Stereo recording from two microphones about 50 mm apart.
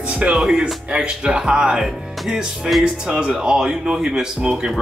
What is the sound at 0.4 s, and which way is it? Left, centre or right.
Speech, centre.